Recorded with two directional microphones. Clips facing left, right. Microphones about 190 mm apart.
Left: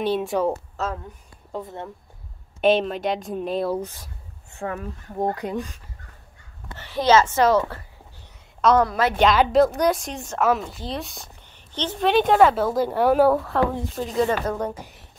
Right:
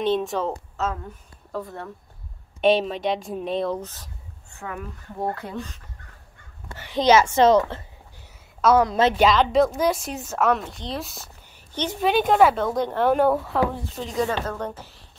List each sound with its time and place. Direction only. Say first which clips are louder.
0.0 s a woman's voice: left 1 dB; 10° left (ahead or behind)
0.8 s speech: right 4 dB; 35° left (ahead or behind)
1.5 s speech: even; 20° left (ahead or behind)
2.6 s speech: even; centre (ahead or behind)
4.6 s speech: left 4 dB; 35° left (ahead or behind)
5.2 s a woman's voice: left 4 dB; 15° left (ahead or behind)
6.7 s a child's voice: even; 15° right (ahead or behind)
8.5 s a woman's voice: even; 5° right (ahead or behind)
8.8 s a woman's voice: right 2 dB; 25° right (ahead or behind)
9.2 s a child's voice: left 3 dB; centre (ahead or behind)